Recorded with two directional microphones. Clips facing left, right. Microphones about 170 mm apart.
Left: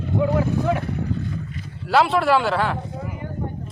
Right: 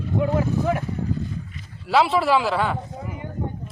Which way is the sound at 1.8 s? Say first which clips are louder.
Left 1 dB; centre (ahead or behind).